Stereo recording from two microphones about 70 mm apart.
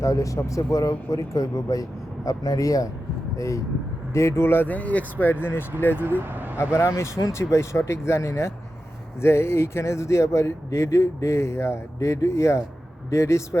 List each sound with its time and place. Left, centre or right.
0.0 s speech: left
6.1 s speech: right
6.7 s speech: left